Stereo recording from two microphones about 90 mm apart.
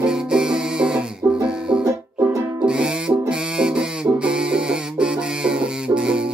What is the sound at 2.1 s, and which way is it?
Music, 10° right (ahead or behind).